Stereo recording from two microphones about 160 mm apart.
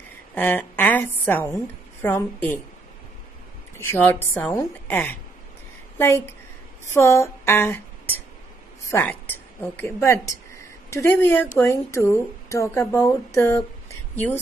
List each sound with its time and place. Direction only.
0.3 s a woman's voice: 10° left (ahead or behind)
3.7 s speech: 15° left (ahead or behind)
6.9 s a sound: 15° left (ahead or behind)
8.9 s a woman's voice: 10° left (ahead or behind)